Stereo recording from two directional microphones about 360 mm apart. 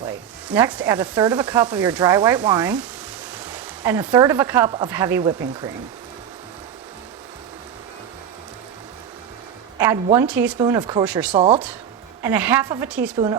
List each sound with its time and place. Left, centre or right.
0.5 s sizzle: centre
3.4 s speech: centre
9.7 s speech: centre
11.3 s speech: centre